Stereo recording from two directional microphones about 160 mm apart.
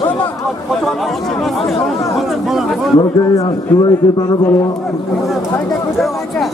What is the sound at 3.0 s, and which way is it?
A man's voice, 20° left (ahead or behind).